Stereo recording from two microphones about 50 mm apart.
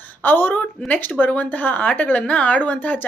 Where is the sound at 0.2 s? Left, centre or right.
Left.